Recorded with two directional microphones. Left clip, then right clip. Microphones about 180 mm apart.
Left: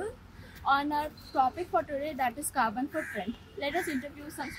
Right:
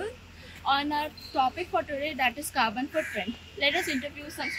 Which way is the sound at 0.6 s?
15° left (ahead or behind).